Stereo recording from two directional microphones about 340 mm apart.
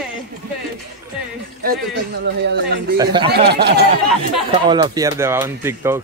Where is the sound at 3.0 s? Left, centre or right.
Centre.